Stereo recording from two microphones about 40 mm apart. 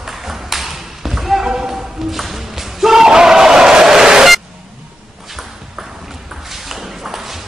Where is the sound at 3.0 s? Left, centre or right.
Centre.